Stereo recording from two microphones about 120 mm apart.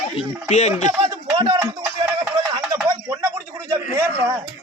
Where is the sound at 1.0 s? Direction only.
35° right (ahead or behind).